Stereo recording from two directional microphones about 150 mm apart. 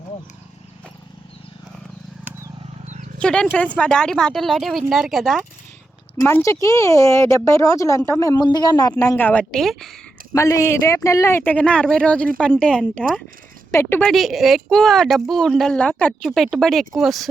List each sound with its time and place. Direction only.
2.8 s wild animals: 50° right (ahead or behind)
3.2 s speech: 5° left (ahead or behind)
6.1 s speech: 15° left (ahead or behind); by 9.9 s centre (ahead or behind)
10.3 s speech: 20° left (ahead or behind)
13.7 s a sound: 20° left (ahead or behind)
14.0 s speech: centre (ahead or behind)